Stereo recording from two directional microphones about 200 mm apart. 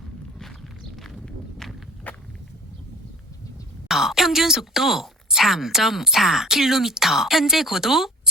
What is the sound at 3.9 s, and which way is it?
Speech, centre (ahead or behind).